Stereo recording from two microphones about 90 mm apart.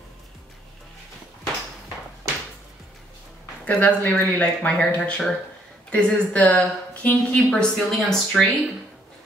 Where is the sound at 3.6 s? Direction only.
20° left (ahead or behind).